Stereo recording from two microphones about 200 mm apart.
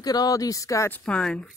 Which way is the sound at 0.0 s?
20° left (ahead or behind).